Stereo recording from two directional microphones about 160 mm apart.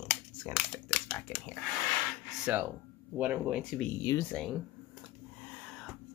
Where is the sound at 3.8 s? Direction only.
15° left (ahead or behind).